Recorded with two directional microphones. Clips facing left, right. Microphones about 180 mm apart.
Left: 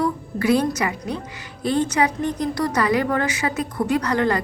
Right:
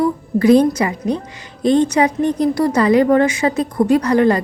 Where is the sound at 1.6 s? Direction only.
15° right (ahead or behind).